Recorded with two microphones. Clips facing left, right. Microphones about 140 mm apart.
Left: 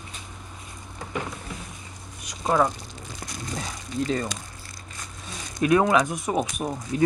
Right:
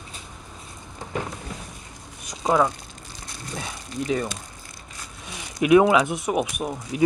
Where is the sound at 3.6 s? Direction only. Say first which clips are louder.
Left 2 dB; 10° right (ahead or behind).